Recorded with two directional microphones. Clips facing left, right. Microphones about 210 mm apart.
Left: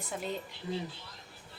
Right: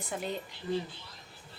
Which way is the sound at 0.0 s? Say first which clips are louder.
Right 1 dB; centre (ahead or behind).